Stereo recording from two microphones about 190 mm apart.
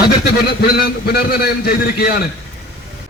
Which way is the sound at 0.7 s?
55° left (ahead or behind).